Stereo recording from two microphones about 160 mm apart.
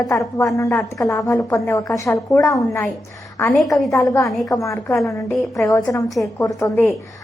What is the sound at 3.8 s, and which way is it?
A woman's voice, 20° left (ahead or behind).